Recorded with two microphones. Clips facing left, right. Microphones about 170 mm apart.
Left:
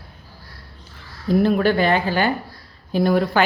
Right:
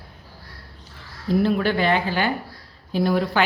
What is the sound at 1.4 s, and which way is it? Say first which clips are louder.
Speech: left 3 dB; 45° left (ahead or behind).